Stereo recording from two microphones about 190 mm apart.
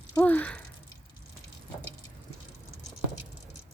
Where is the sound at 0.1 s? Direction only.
10° left (ahead or behind).